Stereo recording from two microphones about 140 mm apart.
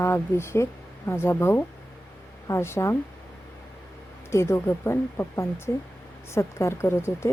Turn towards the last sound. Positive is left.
turn(degrees=20)  # may be behind; listen again after turning